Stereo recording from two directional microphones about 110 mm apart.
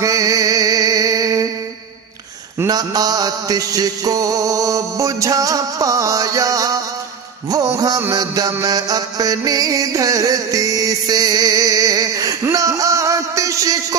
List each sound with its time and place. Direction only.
0.0 s music: 30° right (ahead or behind)
2.6 s mantra: 35° right (ahead or behind)
7.5 s a sound: 30° right (ahead or behind)
8.1 s music: 30° right (ahead or behind)